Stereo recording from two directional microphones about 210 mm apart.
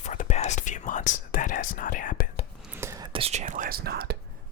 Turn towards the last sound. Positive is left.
turn(degrees=-50)  # may be behind; listen again after turning